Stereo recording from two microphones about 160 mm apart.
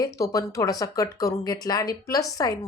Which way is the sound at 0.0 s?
20° left (ahead or behind).